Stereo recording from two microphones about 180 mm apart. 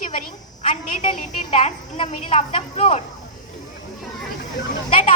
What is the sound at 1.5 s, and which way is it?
A woman's voice, 40° left (ahead or behind).